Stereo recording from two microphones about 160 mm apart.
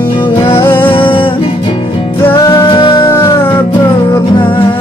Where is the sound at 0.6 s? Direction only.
15° left (ahead or behind).